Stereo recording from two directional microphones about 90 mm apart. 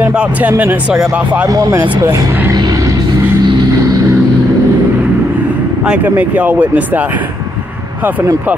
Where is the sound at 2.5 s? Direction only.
45° right (ahead or behind).